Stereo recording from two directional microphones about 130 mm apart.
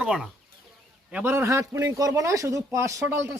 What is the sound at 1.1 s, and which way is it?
A man's voice, 15° right (ahead or behind).